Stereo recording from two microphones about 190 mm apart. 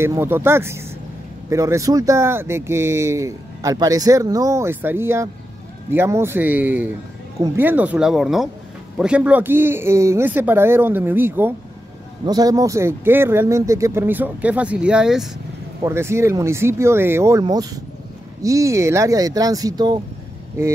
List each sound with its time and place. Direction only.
0.0 s speech: 10° right (ahead or behind)